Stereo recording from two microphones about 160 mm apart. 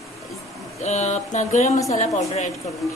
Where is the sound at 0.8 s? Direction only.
45° left (ahead or behind).